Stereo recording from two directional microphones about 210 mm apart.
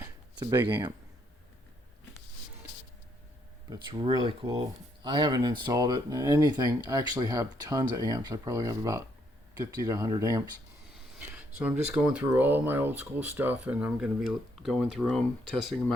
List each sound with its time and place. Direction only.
0.0 s a sound: 10° right (ahead or behind)
3.7 s speech: 25° right (ahead or behind)
10.9 s speech: 5° right (ahead or behind)